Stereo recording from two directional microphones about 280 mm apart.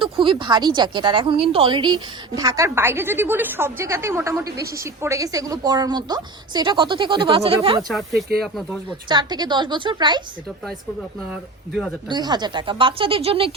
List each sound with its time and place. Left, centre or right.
0.0 s speech: centre
4.4 s a woman's voice: right
4.8 s speech: centre
7.9 s speech: centre
9.0 s speech: centre
11.3 s speech: centre
12.0 s speech: centre